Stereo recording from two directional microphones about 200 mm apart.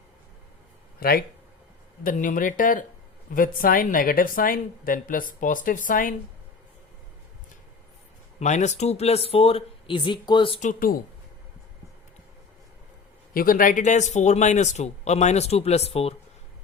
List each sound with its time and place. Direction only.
0.9 s a woman's voice: 50° left (ahead or behind)
8.4 s speech: 35° left (ahead or behind)
13.3 s speech: 45° left (ahead or behind)